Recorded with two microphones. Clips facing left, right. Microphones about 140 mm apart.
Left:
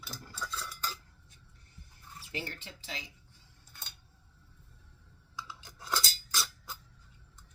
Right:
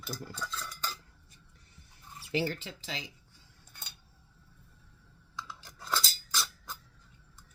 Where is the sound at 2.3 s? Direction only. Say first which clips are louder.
Right 9 dB; 90° right.